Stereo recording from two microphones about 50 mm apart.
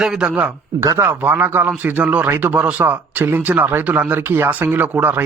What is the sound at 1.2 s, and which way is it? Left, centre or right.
A man's voice, right.